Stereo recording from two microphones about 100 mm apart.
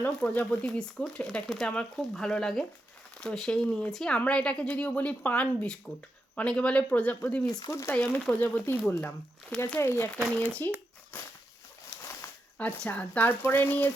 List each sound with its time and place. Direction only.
0.0 s speech: 15° left (ahead or behind)
7.4 s speech: 40° left (ahead or behind)
7.7 s speech: 30° left (ahead or behind)
7.9 s speech: 15° left (ahead or behind)
10.2 s speech: 15° right (ahead or behind)
12.5 s speech: 15° left (ahead or behind)